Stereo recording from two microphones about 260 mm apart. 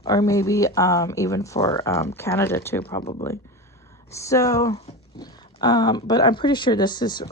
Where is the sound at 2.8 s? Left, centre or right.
Left.